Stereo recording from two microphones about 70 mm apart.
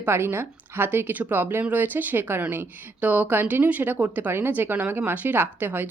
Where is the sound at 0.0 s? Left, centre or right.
Right.